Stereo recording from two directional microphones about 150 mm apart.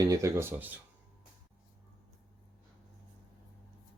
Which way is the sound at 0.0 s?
20° right (ahead or behind).